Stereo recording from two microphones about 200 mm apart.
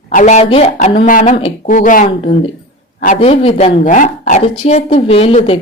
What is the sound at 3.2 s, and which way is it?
Speech, 30° left (ahead or behind).